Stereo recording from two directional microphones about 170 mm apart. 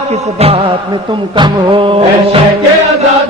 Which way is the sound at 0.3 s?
35° right (ahead or behind).